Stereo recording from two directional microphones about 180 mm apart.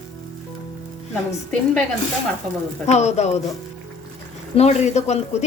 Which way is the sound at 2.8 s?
40° left (ahead or behind).